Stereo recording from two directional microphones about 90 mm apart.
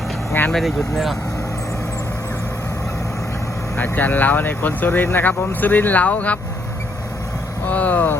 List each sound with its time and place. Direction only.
0.5 s speech: 5° left (ahead or behind)
3.8 s speech: 20° left (ahead or behind)
7.7 s speech: 15° left (ahead or behind)